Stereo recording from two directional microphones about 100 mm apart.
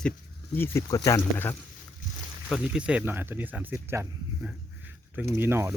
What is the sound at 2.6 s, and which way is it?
Speech, 10° right (ahead or behind).